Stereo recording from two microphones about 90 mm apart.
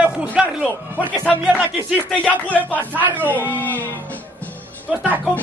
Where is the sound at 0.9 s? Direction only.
15° left (ahead or behind).